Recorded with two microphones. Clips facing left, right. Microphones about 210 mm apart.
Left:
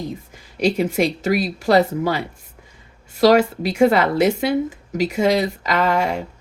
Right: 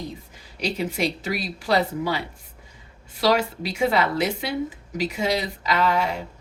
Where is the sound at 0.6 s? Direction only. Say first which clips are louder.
Left 7 dB; 50° left (ahead or behind).